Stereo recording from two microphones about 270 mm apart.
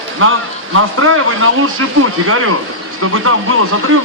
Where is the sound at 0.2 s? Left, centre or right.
Right.